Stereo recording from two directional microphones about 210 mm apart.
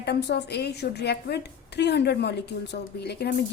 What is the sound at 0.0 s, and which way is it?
A woman's voice, 50° left (ahead or behind).